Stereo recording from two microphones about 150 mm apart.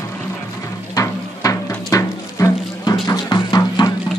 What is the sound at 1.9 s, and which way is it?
Music, 20° left (ahead or behind).